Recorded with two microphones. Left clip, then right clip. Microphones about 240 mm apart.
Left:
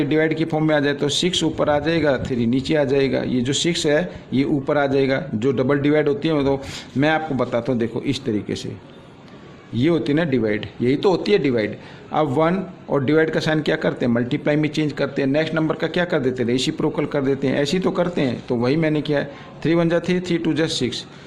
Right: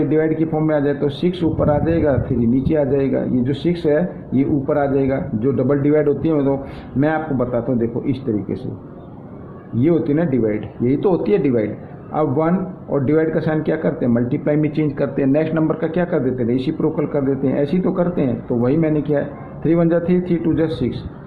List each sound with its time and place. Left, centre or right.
0.1 s a man's voice: left
9.8 s a man's voice: left